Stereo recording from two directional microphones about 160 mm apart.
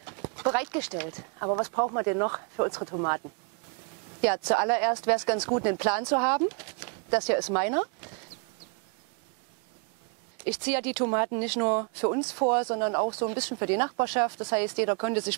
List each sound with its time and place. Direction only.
0.0 s clip-clop: 20° right (ahead or behind)
1.0 s speech: 25° right (ahead or behind)
4.2 s speech: 15° right (ahead or behind)
10.4 s speech: 10° right (ahead or behind)
13.4 s speech: 10° right (ahead or behind)